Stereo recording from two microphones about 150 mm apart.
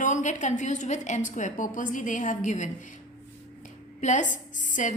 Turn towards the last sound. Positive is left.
turn(degrees=60)  # may be behind; listen again after turning